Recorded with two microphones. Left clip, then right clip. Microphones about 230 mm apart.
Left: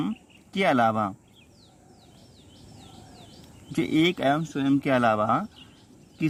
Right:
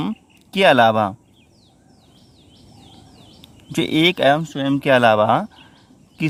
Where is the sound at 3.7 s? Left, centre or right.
Right.